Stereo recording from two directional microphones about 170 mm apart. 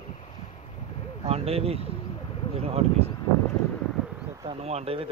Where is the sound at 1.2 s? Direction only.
35° right (ahead or behind).